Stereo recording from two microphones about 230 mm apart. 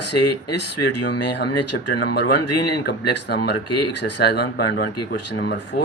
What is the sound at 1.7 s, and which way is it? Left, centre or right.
Speech, left.